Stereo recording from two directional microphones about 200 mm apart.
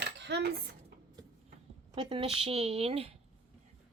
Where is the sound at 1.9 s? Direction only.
25° right (ahead or behind).